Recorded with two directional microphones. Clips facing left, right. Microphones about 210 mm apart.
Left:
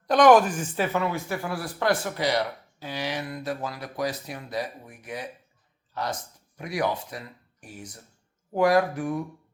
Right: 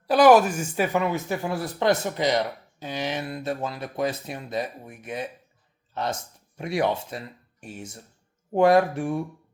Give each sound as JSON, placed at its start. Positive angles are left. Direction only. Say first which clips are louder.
{"t": 0.1, "sound": "a woman's voice", "louder": "right 1 dB", "side_deg": -5}